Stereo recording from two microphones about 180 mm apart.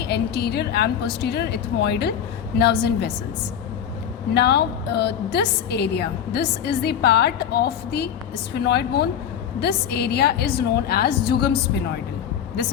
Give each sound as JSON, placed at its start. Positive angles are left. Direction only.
{"t": 0.0, "sound": "a woman's voice", "side_deg": 70}
{"t": 4.4, "sound": "a woman's voice", "side_deg": 65}